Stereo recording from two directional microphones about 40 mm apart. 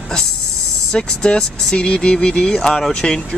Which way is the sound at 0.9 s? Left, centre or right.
Left.